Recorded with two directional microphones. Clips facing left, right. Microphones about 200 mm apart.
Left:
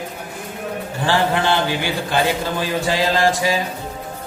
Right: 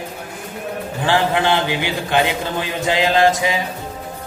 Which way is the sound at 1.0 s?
15° right (ahead or behind).